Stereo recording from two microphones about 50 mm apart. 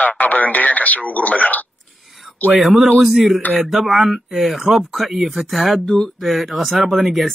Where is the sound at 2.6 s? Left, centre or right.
Centre.